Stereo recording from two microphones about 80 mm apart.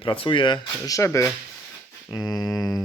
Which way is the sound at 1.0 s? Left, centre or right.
Left.